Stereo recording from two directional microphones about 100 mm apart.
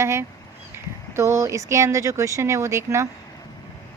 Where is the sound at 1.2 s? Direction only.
30° right (ahead or behind).